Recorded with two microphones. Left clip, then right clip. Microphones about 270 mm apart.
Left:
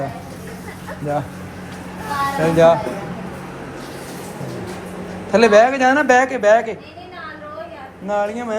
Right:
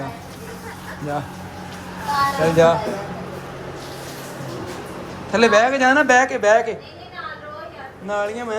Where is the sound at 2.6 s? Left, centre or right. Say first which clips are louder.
Left 3 dB; centre.